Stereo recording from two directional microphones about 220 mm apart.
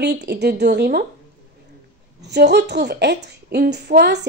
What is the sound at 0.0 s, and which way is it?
A woman's voice, 50° right (ahead or behind).